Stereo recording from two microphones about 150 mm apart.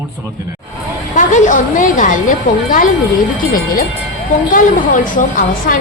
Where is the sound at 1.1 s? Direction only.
55° left (ahead or behind).